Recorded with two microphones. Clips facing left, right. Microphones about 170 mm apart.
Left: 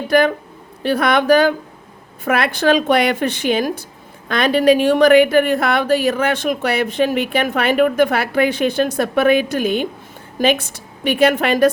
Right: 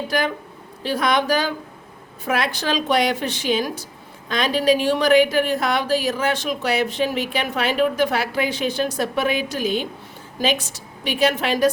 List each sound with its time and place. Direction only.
0.1 s a woman's voice: 60° left (ahead or behind)